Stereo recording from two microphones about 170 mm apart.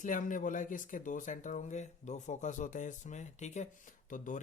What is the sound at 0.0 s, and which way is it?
Speech, 50° left (ahead or behind).